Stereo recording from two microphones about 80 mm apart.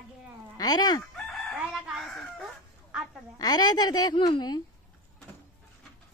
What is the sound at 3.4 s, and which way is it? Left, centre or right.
Speech, left.